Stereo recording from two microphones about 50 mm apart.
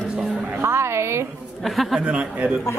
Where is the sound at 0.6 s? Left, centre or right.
Right.